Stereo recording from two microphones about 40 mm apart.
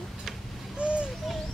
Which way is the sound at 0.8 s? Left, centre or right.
Right.